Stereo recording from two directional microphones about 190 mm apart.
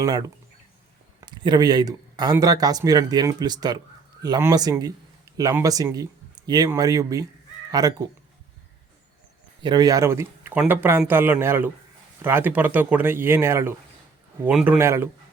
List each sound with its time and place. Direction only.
0.0 s speech: 20° right (ahead or behind)
9.6 s speech: 20° right (ahead or behind)